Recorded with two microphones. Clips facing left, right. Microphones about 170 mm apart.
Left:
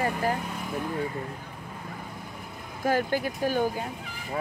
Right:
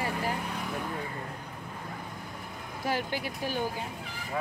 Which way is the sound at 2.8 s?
45° left (ahead or behind).